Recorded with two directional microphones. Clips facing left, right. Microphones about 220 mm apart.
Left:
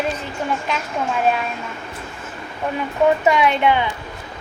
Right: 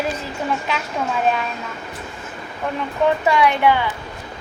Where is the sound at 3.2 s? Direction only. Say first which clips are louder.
Even; 20° left (ahead or behind).